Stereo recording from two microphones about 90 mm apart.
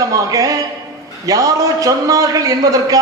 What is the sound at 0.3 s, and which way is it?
A man's voice, 40° right (ahead or behind).